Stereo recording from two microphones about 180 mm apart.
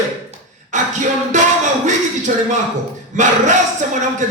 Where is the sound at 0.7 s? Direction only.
45° right (ahead or behind).